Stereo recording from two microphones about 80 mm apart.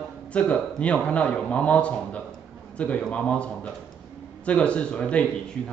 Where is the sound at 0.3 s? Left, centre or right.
Centre.